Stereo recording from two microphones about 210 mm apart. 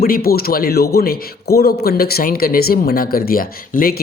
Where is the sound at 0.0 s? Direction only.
45° left (ahead or behind).